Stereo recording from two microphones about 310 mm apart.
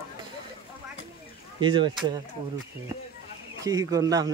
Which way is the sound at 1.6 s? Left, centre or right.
Centre.